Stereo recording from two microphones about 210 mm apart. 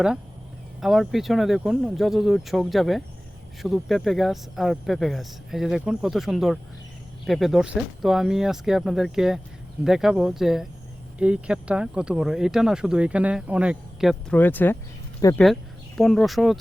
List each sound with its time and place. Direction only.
0.8 s speech: centre (ahead or behind); by 15.4 s 15° left (ahead or behind)
16.0 s speech: centre (ahead or behind)